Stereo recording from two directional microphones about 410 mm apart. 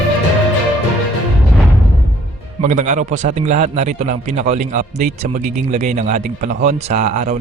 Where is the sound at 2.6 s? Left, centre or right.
Centre.